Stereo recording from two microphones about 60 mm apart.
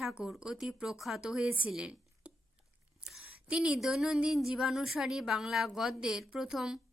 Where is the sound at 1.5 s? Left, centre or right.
Right.